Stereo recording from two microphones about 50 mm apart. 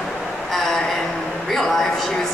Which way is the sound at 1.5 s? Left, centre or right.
Centre.